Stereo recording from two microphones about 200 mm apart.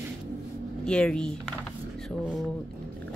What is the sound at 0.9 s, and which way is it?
Speech, 5° left (ahead or behind).